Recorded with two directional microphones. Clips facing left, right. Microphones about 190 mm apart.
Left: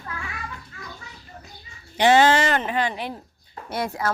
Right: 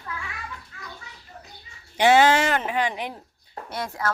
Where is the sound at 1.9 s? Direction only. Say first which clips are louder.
Left 1 dB; 10° right (ahead or behind).